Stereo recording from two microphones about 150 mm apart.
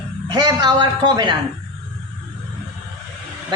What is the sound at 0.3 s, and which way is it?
A woman's voice, 30° right (ahead or behind).